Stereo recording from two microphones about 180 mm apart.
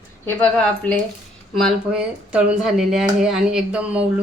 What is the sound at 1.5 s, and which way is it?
A woman's voice, centre (ahead or behind).